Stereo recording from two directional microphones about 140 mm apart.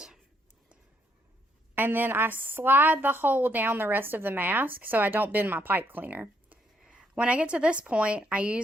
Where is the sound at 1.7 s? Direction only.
15° right (ahead or behind).